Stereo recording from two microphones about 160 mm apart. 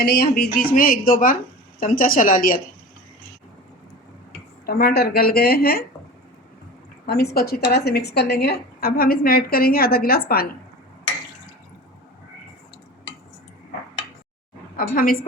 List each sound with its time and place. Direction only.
0.0 s a woman's voice: 75° left (ahead or behind); by 2.6 s 60° left (ahead or behind)
4.6 s a woman's voice: 75° left (ahead or behind)
7.0 s a woman's voice: 90° left; by 10.5 s 70° left (ahead or behind)
14.8 s a woman's voice: 65° left (ahead or behind)